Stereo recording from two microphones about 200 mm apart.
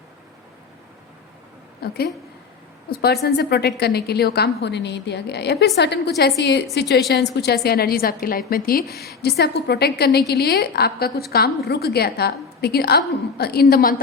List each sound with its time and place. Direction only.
1.8 s a woman's voice: 50° left (ahead or behind)